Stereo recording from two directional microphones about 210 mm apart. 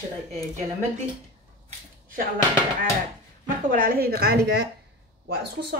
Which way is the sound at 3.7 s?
45° right (ahead or behind).